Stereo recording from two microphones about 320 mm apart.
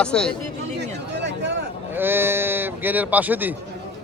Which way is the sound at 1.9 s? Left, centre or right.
Centre.